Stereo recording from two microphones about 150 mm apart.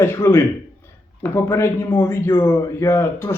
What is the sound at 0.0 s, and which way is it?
A man's voice, 15° left (ahead or behind).